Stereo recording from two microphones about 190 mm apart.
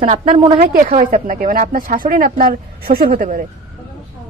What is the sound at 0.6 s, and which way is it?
Speech, 45° right (ahead or behind).